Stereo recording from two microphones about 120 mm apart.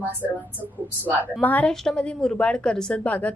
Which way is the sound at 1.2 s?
15° left (ahead or behind).